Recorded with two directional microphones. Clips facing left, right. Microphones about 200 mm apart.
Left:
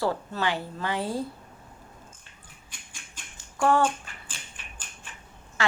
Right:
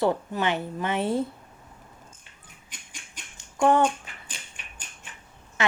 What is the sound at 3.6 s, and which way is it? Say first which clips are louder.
Speech: right 2 dB; 20° right (ahead or behind).